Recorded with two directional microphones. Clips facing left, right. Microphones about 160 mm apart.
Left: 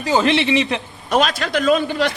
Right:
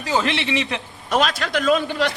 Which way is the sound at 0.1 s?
25° left (ahead or behind).